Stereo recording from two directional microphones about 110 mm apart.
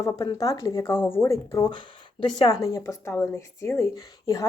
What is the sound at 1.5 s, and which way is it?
Speech, 35° left (ahead or behind).